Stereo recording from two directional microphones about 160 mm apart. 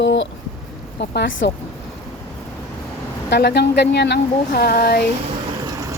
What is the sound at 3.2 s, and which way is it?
Speech, 90° left.